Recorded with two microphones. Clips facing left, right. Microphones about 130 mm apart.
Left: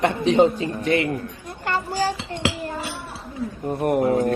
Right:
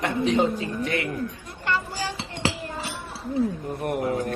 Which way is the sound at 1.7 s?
40° left (ahead or behind).